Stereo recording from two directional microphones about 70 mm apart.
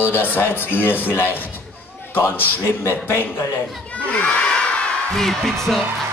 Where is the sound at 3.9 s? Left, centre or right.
Centre.